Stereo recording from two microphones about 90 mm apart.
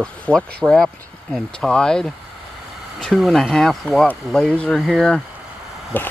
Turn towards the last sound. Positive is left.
turn(degrees=20)  # may be behind; listen again after turning